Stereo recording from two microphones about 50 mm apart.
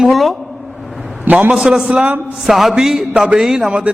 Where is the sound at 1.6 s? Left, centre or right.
Centre.